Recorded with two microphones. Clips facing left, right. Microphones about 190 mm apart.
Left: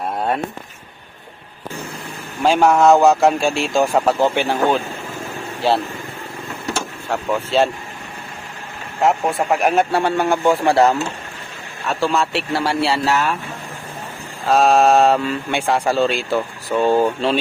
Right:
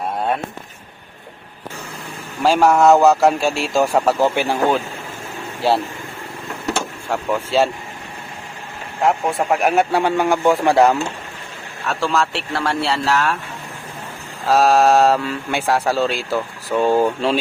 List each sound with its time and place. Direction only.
2.4 s speech: 5° right (ahead or behind)
7.1 s speech: 5° right (ahead or behind)
9.0 s speech: centre (ahead or behind); by 10.9 s 15° right (ahead or behind)
11.9 s speech: centre (ahead or behind)
14.4 s speech: centre (ahead or behind)